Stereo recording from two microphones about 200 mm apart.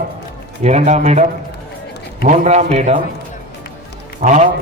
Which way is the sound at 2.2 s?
35° right (ahead or behind).